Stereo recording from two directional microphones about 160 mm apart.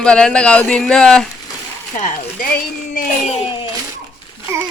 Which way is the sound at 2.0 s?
50° left (ahead or behind).